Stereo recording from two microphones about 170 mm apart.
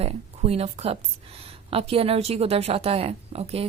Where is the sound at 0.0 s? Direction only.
35° right (ahead or behind).